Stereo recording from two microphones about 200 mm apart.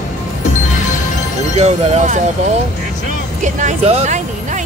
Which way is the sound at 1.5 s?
30° right (ahead or behind).